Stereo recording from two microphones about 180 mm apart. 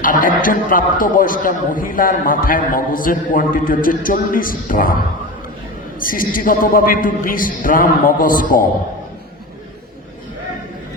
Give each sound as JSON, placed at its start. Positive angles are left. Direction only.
{"t": 0.0, "sound": "a man's voice", "side_deg": 50}
{"t": 6.0, "sound": "a man's voice", "side_deg": 50}